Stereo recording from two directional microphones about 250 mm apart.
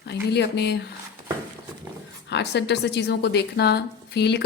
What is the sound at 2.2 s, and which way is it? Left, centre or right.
A woman's voice, left.